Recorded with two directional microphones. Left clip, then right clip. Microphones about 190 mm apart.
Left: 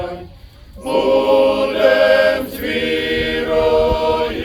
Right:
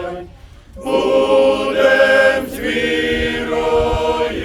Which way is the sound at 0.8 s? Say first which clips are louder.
Even; 45° right (ahead or behind).